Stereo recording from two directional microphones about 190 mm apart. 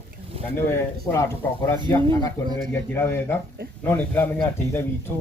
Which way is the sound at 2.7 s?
10° left (ahead or behind).